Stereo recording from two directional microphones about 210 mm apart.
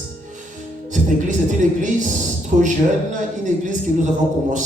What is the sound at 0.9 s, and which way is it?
Music, 35° right (ahead or behind).